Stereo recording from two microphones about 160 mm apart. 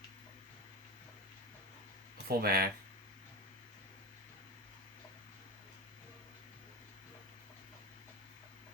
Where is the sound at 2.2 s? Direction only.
75° right (ahead or behind).